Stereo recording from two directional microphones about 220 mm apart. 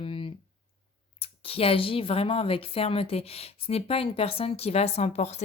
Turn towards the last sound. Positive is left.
turn(degrees=30)  # may be behind; listen again after turning